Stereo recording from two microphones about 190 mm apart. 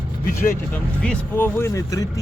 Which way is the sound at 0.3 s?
45° left (ahead or behind).